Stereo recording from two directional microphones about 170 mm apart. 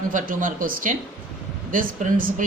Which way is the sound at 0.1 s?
50° right (ahead or behind).